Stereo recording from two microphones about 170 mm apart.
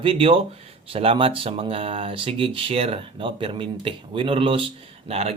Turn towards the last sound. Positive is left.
turn(degrees=-35)  # may be behind; listen again after turning